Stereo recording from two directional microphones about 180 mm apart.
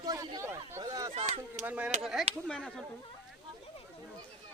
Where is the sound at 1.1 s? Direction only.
40° right (ahead or behind).